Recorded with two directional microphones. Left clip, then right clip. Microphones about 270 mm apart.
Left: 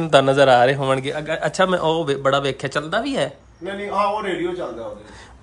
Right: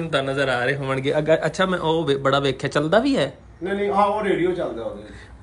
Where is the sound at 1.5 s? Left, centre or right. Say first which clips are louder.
Left 3 dB; centre.